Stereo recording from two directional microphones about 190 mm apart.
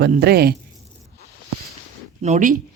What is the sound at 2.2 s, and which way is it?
Speech, 40° right (ahead or behind).